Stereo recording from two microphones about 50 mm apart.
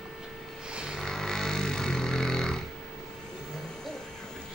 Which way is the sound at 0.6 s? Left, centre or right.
Centre.